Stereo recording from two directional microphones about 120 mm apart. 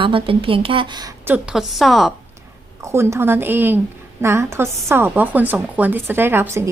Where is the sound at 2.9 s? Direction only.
20° right (ahead or behind).